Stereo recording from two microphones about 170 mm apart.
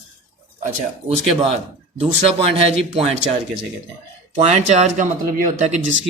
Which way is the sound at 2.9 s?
35° right (ahead or behind).